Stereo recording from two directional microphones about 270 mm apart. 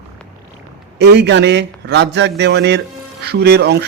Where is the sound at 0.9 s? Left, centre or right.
Right.